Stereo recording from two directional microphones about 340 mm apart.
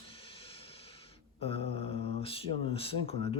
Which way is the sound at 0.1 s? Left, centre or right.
Centre.